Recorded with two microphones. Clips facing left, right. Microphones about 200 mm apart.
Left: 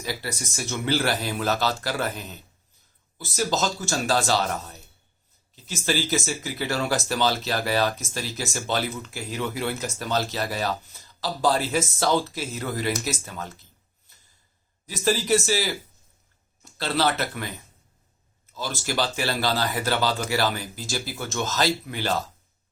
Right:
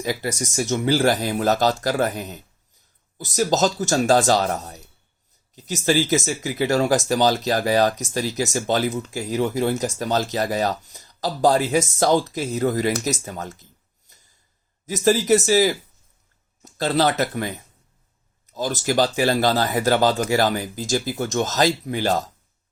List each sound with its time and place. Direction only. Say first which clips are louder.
0.0 s speech: right 7 dB; 45° right (ahead or behind)
3.3 s speech: right 6 dB; 45° right (ahead or behind)
14.8 s speech: right 6 dB; 45° right (ahead or behind)
18.5 s speech: right 7 dB; 45° right (ahead or behind)